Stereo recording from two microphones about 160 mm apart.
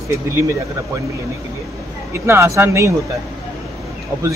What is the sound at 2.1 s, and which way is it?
Speech, 15° right (ahead or behind).